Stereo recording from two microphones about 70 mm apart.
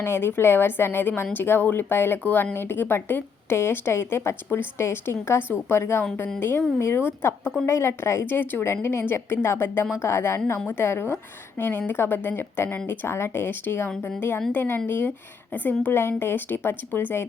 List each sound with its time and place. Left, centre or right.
0.0 s speech: left